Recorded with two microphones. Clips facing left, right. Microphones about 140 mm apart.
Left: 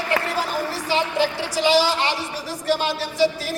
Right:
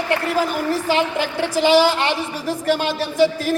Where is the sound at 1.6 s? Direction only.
50° right (ahead or behind).